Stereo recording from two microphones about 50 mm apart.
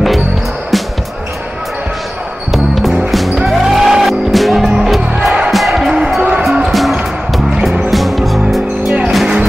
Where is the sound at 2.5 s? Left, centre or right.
Centre.